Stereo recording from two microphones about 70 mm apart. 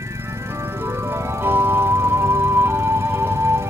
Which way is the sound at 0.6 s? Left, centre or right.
Right.